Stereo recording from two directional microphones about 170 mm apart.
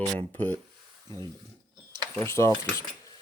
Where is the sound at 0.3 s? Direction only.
10° left (ahead or behind).